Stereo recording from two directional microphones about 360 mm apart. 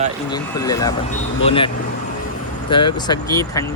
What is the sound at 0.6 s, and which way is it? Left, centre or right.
Speech, centre.